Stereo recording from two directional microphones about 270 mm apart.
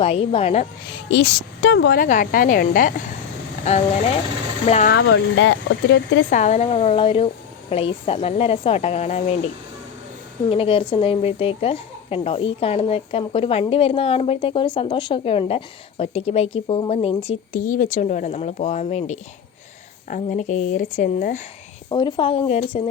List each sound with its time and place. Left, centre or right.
0.0 s speech: left
1.1 s speech: left
4.9 s speech: left
6.3 s speech: left
10.5 s speech: centre
21.8 s speech: centre